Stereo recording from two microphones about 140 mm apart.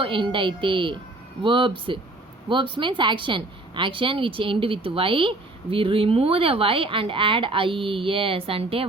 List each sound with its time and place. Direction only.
0.0 s speech: 35° right (ahead or behind)